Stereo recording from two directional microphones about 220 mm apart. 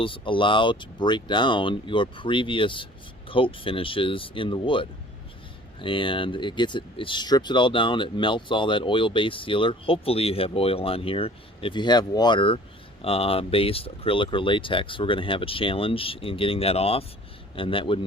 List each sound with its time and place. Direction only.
0.0 s speech: 25° left (ahead or behind)